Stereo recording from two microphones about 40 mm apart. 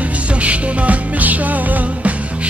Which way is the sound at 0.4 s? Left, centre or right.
Right.